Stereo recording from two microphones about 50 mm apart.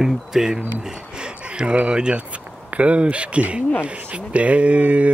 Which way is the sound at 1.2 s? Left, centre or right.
Centre.